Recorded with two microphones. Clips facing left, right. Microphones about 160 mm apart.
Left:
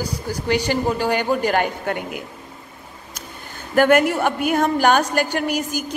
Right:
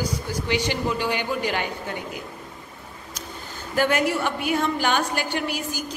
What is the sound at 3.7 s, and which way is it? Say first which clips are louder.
A woman's voice: left 6 dB; 55° left (ahead or behind).